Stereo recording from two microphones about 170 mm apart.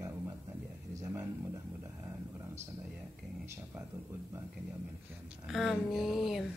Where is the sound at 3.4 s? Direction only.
15° right (ahead or behind).